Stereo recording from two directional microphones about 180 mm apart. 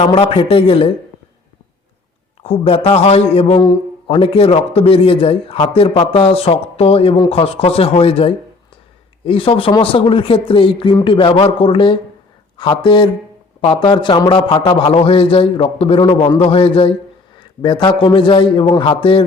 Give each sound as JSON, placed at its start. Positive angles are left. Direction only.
{"t": 0.0, "sound": "a man's voice", "side_deg": 30}
{"t": 2.4, "sound": "a man's voice", "side_deg": 35}